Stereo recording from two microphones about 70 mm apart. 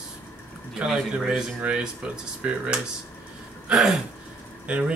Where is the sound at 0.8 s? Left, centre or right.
Centre.